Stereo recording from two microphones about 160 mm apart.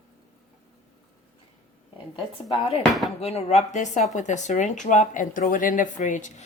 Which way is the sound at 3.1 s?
40° left (ahead or behind).